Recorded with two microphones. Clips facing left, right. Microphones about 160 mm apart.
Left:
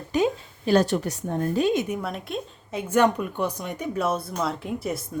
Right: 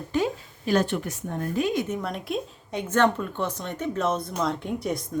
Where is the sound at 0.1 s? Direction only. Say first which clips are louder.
Left 3 dB; 15° left (ahead or behind).